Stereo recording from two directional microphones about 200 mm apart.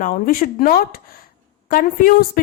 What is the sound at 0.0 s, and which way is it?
Speech, 45° left (ahead or behind).